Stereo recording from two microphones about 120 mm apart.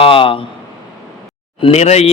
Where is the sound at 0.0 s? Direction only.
50° left (ahead or behind).